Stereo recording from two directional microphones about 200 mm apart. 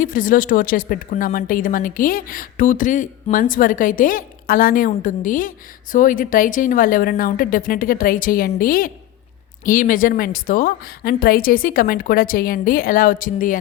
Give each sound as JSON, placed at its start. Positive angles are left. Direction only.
{"t": 0.0, "sound": "speech", "side_deg": 45}